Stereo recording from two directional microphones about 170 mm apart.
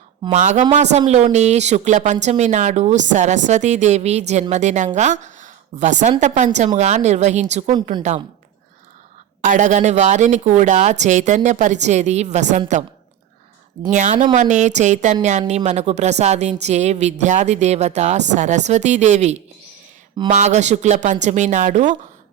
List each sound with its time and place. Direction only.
0.3 s a woman's voice: 45° right (ahead or behind)
9.4 s a woman's voice: 45° right (ahead or behind)
13.9 s a woman's voice: 45° right (ahead or behind)